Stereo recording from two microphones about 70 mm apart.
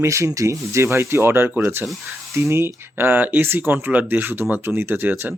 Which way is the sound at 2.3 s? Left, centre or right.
Right.